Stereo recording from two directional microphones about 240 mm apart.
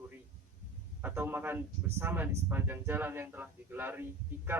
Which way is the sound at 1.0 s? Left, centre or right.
Centre.